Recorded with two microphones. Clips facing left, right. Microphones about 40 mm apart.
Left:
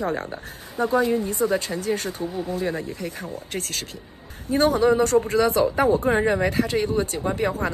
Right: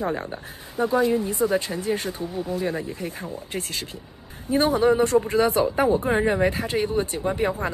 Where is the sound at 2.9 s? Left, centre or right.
Right.